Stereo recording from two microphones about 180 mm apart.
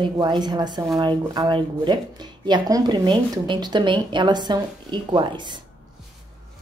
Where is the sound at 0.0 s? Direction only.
25° right (ahead or behind).